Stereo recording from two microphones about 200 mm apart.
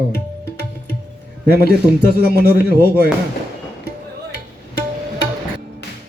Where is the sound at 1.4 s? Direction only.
50° right (ahead or behind).